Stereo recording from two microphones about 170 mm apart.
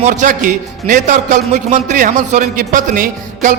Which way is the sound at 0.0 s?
45° right (ahead or behind).